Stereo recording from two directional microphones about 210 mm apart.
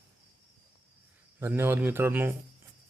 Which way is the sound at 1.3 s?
10° right (ahead or behind).